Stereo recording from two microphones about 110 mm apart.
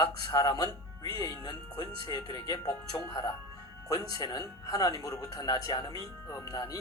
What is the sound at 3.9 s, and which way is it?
Speech, 35° left (ahead or behind).